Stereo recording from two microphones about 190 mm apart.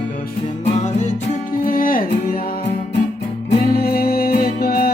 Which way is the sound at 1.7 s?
50° left (ahead or behind).